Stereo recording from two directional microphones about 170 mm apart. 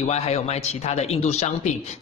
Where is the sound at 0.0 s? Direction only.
40° left (ahead or behind).